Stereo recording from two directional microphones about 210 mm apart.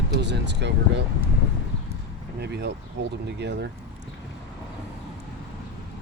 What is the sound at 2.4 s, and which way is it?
Speech, 50° right (ahead or behind).